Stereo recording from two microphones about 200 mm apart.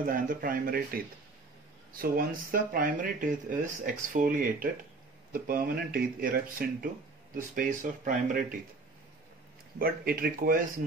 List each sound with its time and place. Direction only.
0.0 s speech: 45° right (ahead or behind)
9.8 s speech: 50° right (ahead or behind)